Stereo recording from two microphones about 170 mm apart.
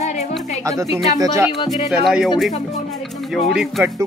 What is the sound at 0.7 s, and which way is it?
Speech, 20° right (ahead or behind).